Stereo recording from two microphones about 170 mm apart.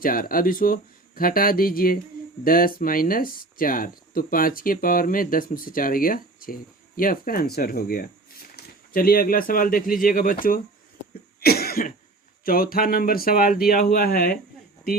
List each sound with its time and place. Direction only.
0.0 s speech: 55° left (ahead or behind)
11.3 s cough: 65° left (ahead or behind)
12.5 s speech: 60° left (ahead or behind)